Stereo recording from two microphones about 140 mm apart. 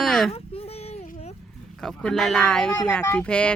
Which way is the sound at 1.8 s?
Centre (ahead or behind).